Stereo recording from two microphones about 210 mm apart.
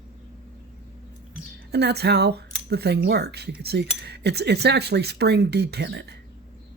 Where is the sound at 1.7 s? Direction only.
50° right (ahead or behind).